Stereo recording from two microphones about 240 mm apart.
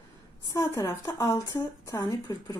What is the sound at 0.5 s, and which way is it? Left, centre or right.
Speech, centre.